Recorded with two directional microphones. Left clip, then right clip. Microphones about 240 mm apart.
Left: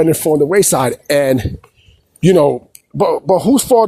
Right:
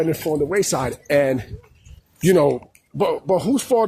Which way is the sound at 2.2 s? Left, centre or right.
Left.